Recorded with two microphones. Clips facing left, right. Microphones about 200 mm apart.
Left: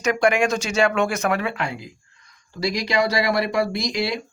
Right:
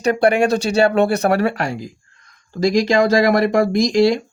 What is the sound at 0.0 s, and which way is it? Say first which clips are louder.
Speech: right 4 dB; 35° right (ahead or behind).